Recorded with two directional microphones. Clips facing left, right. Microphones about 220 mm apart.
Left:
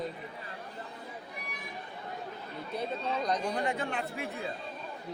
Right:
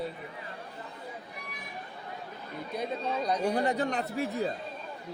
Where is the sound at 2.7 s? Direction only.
10° right (ahead or behind).